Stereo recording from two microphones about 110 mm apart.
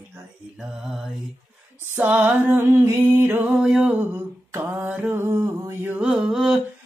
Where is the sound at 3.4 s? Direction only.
10° right (ahead or behind).